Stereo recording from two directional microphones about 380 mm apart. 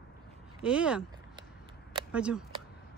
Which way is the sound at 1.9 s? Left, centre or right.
Centre.